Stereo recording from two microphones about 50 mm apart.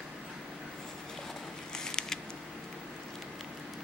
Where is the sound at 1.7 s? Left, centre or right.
Centre.